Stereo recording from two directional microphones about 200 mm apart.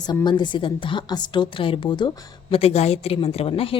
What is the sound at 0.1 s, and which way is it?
A woman's voice, 20° left (ahead or behind).